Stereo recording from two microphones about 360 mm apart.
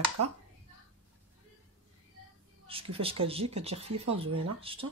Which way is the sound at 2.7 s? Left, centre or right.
Centre.